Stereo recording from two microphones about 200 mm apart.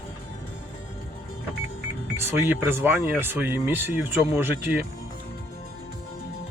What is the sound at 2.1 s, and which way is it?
Speech, 10° right (ahead or behind).